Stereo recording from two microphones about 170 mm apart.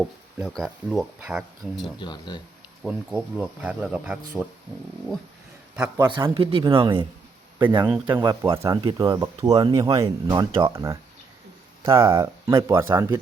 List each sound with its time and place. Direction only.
0.0 s speech: centre (ahead or behind)
2.0 s speech: 25° left (ahead or behind)
2.8 s speech: 5° right (ahead or behind)
5.7 s speech: 10° right (ahead or behind)
6.1 s speech: 30° right (ahead or behind)
7.7 s speech: 10° right (ahead or behind)